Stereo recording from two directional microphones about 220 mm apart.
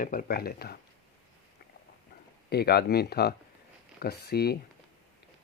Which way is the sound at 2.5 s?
45° left (ahead or behind).